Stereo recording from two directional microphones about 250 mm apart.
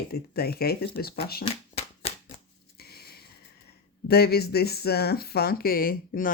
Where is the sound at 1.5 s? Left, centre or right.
Left.